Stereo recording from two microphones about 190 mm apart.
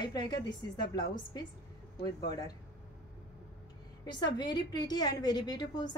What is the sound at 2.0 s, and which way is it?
Speech, 20° left (ahead or behind).